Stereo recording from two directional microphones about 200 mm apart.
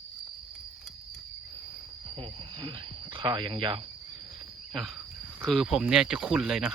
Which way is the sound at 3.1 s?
25° right (ahead or behind).